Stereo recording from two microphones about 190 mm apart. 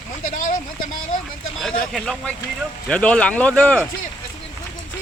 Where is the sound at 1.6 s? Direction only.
5° left (ahead or behind).